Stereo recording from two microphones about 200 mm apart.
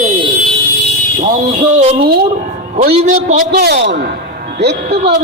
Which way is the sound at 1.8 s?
30° right (ahead or behind).